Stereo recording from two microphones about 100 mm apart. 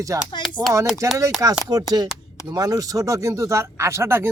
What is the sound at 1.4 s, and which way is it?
Speech, 30° right (ahead or behind).